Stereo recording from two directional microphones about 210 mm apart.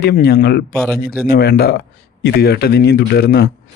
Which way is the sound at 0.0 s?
45° left (ahead or behind).